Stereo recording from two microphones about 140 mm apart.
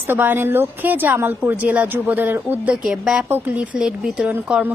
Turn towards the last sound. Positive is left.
turn(degrees=-10)  # may be behind; listen again after turning